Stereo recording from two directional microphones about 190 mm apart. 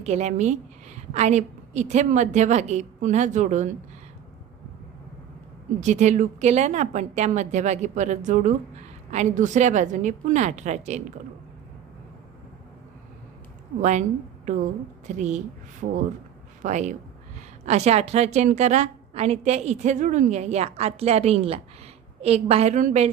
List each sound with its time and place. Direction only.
0.0 s a woman's voice: 35° right (ahead or behind)
5.8 s a woman's voice: 40° right (ahead or behind)
14.4 s a woman's voice: 40° right (ahead or behind)